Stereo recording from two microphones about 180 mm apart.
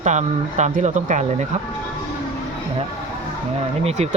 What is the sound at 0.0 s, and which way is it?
Speech, 40° right (ahead or behind).